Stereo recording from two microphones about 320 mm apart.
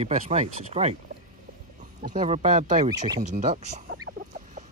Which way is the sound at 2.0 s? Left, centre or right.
Right.